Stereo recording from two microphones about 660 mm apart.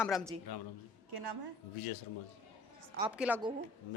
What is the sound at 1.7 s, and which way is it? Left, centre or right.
Speech, left.